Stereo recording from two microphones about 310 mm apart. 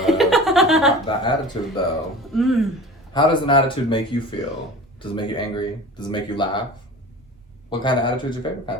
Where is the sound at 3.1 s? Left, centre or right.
Centre.